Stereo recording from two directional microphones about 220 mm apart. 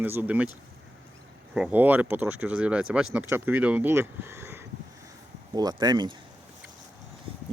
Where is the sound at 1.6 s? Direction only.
5° right (ahead or behind).